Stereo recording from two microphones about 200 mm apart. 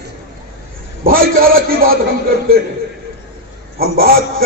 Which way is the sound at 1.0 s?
45° right (ahead or behind).